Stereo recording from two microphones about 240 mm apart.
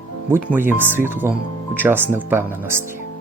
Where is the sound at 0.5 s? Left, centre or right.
Centre.